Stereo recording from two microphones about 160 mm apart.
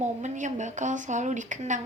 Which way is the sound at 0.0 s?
50° right (ahead or behind).